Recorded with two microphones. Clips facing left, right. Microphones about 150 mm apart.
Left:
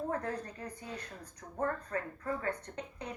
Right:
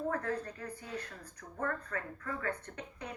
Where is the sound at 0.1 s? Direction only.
30° left (ahead or behind).